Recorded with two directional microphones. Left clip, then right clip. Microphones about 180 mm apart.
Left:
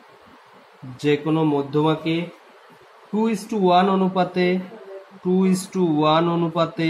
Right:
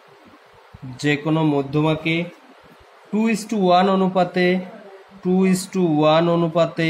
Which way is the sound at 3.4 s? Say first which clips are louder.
Right 1 dB; 30° right (ahead or behind).